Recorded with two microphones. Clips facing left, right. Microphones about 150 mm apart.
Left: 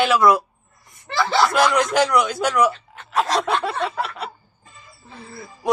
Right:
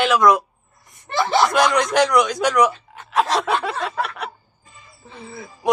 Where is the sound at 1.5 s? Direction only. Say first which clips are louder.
Even; 5° left (ahead or behind).